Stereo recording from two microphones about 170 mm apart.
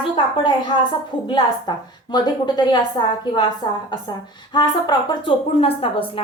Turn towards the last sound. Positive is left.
turn(degrees=35)  # may be behind; listen again after turning